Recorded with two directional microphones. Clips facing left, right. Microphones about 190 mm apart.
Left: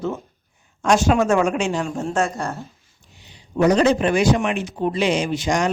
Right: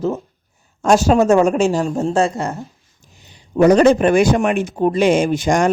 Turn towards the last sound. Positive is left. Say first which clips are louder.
# right 5 dB
turn(degrees=-50)  # may be behind; listen again after turning